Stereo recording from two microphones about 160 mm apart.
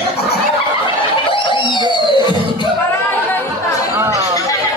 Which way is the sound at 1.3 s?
30° left (ahead or behind).